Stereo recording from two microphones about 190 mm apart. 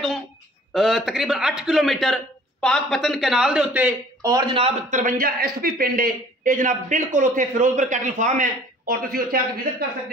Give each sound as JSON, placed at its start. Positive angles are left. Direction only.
{"t": 0.7, "sound": "a man's voice", "side_deg": 0}
{"t": 4.3, "sound": "a man's voice", "side_deg": -25}
{"t": 5.0, "sound": "a man's voice", "side_deg": -50}